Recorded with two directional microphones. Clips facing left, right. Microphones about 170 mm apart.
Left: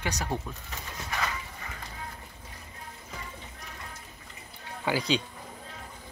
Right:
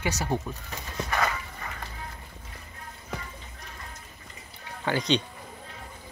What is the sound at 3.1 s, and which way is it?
Music, 70° right (ahead or behind).